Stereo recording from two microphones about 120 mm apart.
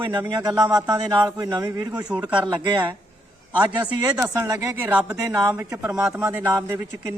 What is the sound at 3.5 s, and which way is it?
Speech, 15° right (ahead or behind).